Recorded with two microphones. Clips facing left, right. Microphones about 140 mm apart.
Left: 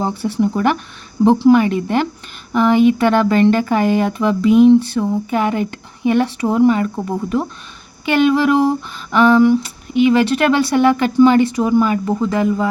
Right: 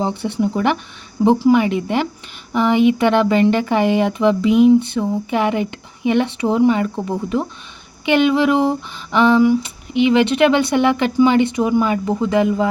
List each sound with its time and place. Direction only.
0.0 s speech: 20° right (ahead or behind)
8.0 s speech: 20° right (ahead or behind)